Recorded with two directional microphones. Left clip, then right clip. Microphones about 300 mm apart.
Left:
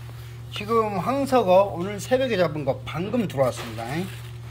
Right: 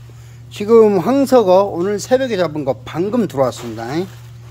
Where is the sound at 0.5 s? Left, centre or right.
Right.